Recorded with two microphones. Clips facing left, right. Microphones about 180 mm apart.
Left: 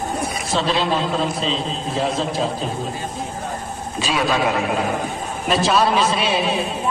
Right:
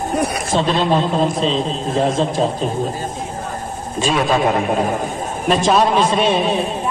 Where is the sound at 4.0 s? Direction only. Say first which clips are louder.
Right 4 dB; 45° right (ahead or behind).